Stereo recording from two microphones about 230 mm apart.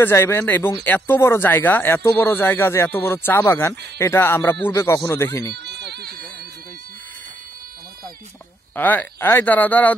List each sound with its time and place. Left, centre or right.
0.0 s speech: centre
5.7 s a sound: right
8.7 s speech: centre